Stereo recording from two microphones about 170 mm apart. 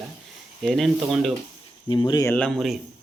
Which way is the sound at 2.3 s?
5° left (ahead or behind).